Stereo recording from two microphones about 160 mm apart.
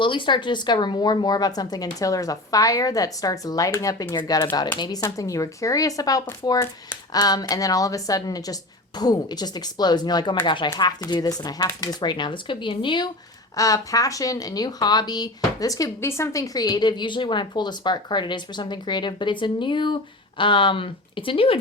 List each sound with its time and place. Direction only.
0.0 s speech: 30° left (ahead or behind)